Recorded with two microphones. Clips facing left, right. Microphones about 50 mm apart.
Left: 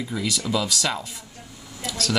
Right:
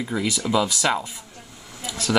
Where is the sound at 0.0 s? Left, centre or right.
Right.